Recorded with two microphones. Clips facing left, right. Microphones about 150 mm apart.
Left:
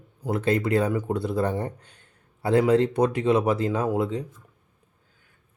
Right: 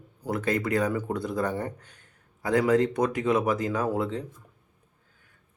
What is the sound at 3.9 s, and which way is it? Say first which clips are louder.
Speech: left 3 dB; 15° left (ahead or behind).